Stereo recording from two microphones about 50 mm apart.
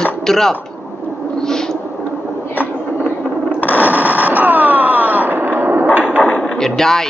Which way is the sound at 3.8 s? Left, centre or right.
Right.